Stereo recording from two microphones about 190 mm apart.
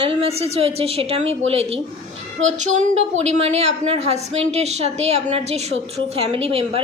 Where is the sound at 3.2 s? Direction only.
35° right (ahead or behind).